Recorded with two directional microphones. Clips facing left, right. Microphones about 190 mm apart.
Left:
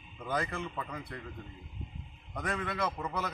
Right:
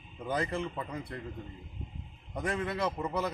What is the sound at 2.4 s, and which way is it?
Speech, 25° right (ahead or behind).